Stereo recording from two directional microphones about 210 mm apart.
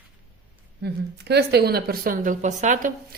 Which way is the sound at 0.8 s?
50° right (ahead or behind).